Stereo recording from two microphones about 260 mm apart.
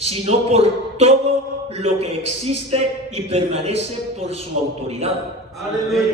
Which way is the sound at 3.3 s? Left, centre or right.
Right.